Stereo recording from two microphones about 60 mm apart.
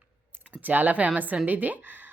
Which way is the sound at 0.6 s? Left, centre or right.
Right.